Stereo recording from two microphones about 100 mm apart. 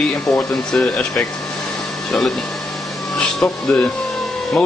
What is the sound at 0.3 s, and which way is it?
Speech, 5° left (ahead or behind).